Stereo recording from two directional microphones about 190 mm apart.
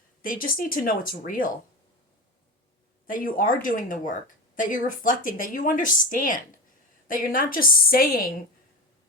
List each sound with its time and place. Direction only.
0.2 s a woman's voice: 50° left (ahead or behind)
3.1 s a woman's voice: 45° left (ahead or behind)